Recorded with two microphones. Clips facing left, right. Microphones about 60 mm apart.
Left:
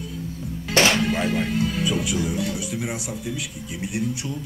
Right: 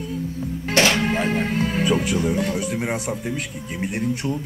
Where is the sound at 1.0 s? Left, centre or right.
Right.